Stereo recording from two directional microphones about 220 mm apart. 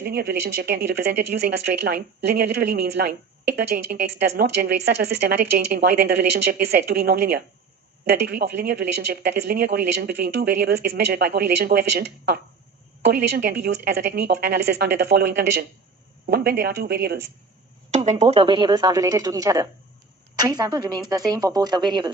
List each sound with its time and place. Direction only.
0.0 s speech: 45° right (ahead or behind)
17.9 s speech: 30° right (ahead or behind)